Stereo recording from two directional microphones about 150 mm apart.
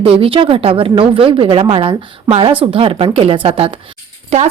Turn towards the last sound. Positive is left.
turn(degrees=-45)  # may be behind; listen again after turning